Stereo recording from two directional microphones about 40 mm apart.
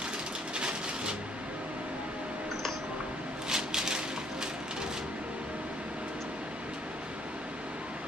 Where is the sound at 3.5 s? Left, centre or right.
Centre.